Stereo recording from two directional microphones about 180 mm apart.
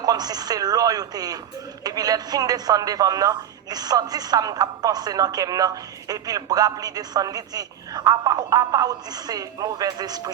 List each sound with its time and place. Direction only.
0.0 s a woman's voice: 20° right (ahead or behind)